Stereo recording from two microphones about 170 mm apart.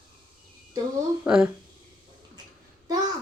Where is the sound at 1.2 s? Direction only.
5° right (ahead or behind).